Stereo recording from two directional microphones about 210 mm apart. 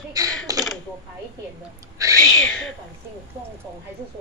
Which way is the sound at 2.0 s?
15° right (ahead or behind).